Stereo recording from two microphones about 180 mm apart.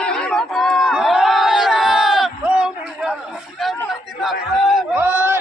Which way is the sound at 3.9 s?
Centre (ahead or behind).